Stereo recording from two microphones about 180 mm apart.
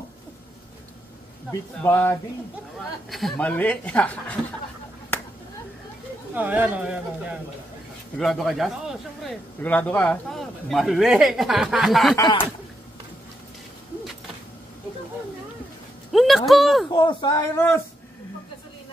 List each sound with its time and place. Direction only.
1.8 s speech: 10° left (ahead or behind)
3.1 s speech: centre (ahead or behind)
6.3 s speech: 10° right (ahead or behind)
12.2 s speech: 25° left (ahead or behind)
16.1 s a man's voice: centre (ahead or behind)
16.9 s speech: 25° left (ahead or behind)